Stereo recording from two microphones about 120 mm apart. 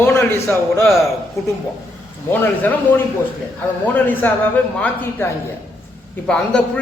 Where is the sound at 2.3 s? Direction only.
15° left (ahead or behind).